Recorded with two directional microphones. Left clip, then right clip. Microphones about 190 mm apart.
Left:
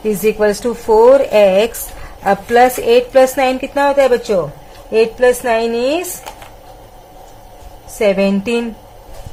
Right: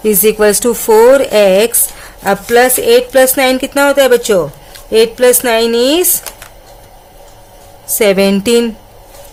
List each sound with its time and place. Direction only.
0.0 s a woman's voice: 35° right (ahead or behind)
7.9 s a woman's voice: 45° right (ahead or behind)